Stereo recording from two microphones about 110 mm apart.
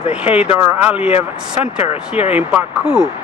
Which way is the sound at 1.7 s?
65° left (ahead or behind).